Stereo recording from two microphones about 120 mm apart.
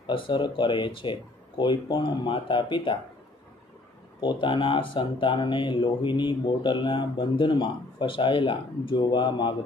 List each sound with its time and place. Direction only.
0.0 s speech: 40° left (ahead or behind)
4.2 s speech: 40° left (ahead or behind)